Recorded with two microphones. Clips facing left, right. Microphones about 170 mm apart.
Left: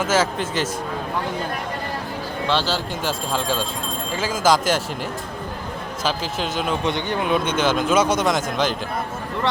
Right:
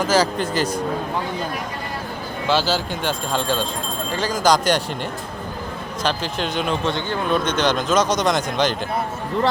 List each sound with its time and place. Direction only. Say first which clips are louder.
0.0 s a man's voice: right 2 dB; centre (ahead or behind)
2.5 s a man's voice: right 3 dB; 5° right (ahead or behind)
6.0 s a man's voice: right 1 dB; 5° left (ahead or behind)
6.8 s speech: even; 15° left (ahead or behind)
7.3 s a man's voice: right 1 dB; 5° left (ahead or behind)